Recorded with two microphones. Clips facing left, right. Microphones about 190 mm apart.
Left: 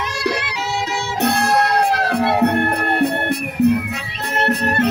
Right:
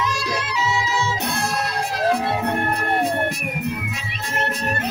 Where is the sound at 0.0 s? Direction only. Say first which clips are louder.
Left 3 dB; 65° left (ahead or behind).